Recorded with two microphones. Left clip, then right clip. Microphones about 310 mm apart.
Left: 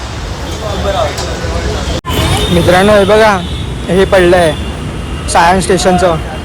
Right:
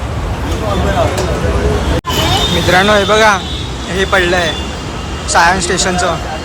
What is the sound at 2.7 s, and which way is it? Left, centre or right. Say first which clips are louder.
Speech: left 3 dB; centre.